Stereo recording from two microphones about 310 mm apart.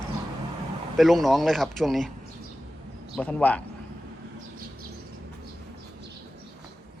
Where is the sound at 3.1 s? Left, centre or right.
Centre.